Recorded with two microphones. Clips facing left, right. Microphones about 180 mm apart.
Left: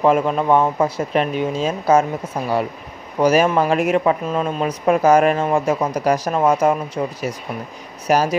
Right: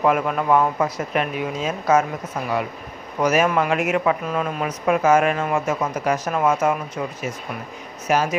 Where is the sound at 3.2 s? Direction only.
30° left (ahead or behind).